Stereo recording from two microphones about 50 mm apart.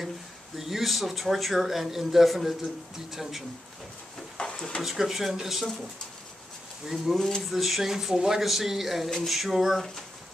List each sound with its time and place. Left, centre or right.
0.6 s a man's voice: centre
4.4 s a sound: centre
4.8 s a man's voice: centre
6.9 s a man's voice: centre